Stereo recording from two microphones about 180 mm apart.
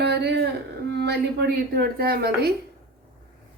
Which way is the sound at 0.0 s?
70° right (ahead or behind).